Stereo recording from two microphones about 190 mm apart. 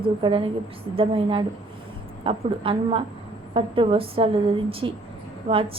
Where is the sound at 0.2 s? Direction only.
25° right (ahead or behind).